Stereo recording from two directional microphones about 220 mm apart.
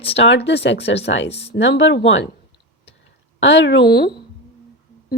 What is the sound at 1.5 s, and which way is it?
Speech, 55° left (ahead or behind).